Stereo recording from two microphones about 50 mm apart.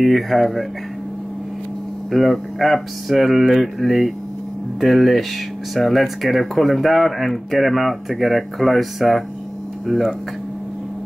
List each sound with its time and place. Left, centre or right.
0.0 s speech: centre
2.0 s speech: centre